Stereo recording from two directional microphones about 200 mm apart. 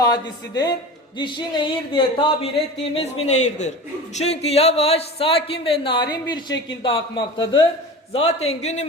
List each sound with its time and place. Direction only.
0.0 s a man's voice: 20° left (ahead or behind)